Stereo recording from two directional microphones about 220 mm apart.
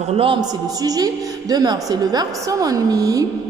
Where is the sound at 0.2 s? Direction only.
20° right (ahead or behind).